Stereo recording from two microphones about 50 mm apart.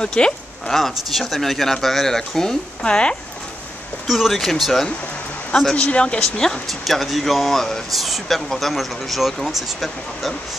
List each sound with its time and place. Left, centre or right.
0.0 s speech: centre
0.7 s speech: centre
4.1 s speech: centre
5.8 s speech: left
6.7 s speech: centre